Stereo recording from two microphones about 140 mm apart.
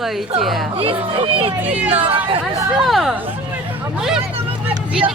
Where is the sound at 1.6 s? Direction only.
10° right (ahead or behind).